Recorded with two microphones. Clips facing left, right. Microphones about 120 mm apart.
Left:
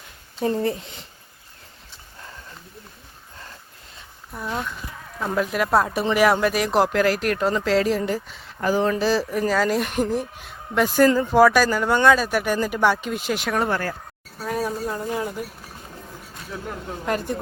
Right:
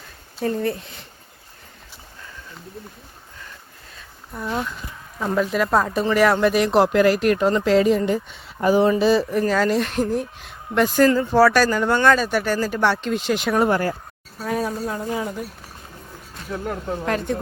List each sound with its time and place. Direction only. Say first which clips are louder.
0.4 s speech: even; 25° left (ahead or behind)
4.4 s speech: right 2 dB; centre (ahead or behind)
8.6 s speech: right 4 dB; 15° right (ahead or behind)
9.0 s speech: right 4 dB; centre (ahead or behind)
13.6 s speech: right 6 dB; 15° right (ahead or behind)
14.3 s speech: right 1 dB; centre (ahead or behind)
17.1 s speech: right 1 dB; 5° left (ahead or behind)